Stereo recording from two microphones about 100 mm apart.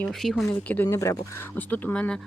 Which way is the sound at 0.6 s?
15° left (ahead or behind).